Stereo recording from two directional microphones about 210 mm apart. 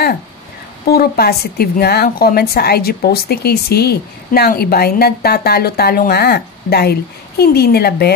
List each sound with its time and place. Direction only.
0.8 s a woman's voice: 50° left (ahead or behind)